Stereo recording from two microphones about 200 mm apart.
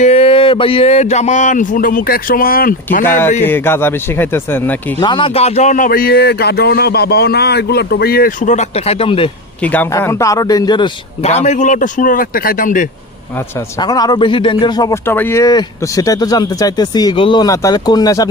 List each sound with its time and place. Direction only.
0.0 s a man's voice: 30° left (ahead or behind)
3.4 s speech: 10° left (ahead or behind)
4.9 s speech: 25° left (ahead or behind)
9.7 s a man's voice: 10° left (ahead or behind); by 12.9 s 40° left (ahead or behind)
13.8 s a man's voice: 20° left (ahead or behind)